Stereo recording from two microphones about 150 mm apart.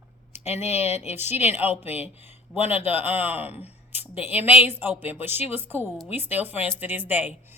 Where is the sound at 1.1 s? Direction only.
15° right (ahead or behind).